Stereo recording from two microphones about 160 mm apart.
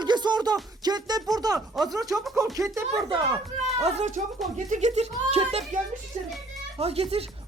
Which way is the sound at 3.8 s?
45° right (ahead or behind).